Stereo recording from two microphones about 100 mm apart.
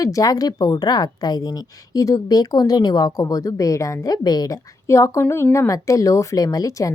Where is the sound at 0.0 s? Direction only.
35° left (ahead or behind).